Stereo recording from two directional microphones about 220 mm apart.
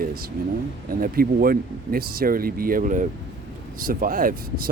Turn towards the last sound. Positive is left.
turn(degrees=-40)  # may be behind; listen again after turning